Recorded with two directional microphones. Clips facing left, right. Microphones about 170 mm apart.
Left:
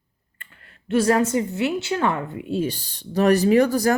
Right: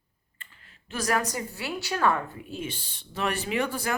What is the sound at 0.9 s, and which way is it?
Speech, 30° left (ahead or behind).